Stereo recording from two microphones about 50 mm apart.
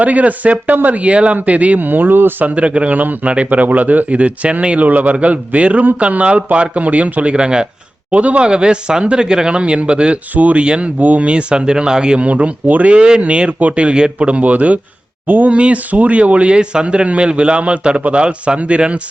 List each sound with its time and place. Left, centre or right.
0.0 s speech: right
2.4 s speech: right
13.5 s speech: right